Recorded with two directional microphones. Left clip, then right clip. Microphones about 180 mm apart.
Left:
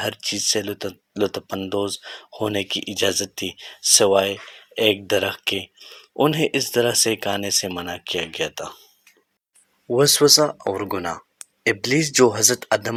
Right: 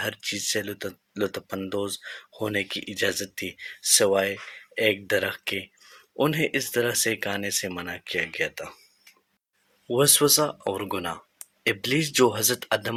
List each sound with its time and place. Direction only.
0.0 s speech: 30° left (ahead or behind)
9.9 s speech: 25° left (ahead or behind)